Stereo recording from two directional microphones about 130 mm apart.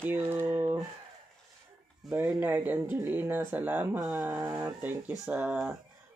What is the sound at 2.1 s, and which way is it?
Speech, 20° right (ahead or behind).